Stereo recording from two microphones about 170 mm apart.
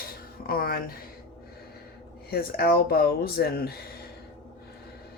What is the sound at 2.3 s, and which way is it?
Speech, 60° left (ahead or behind).